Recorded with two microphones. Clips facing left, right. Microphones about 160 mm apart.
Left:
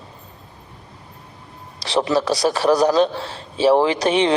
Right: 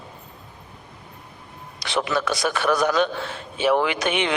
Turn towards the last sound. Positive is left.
turn(degrees=35)  # may be behind; listen again after turning